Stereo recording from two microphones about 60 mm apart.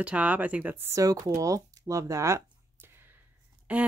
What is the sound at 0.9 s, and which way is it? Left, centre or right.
Speech, right.